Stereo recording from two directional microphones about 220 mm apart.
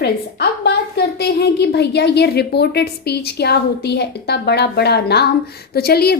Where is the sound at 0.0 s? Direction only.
50° left (ahead or behind).